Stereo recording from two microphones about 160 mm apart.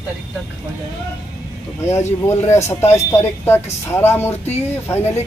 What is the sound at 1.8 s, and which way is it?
Speech, 15° left (ahead or behind).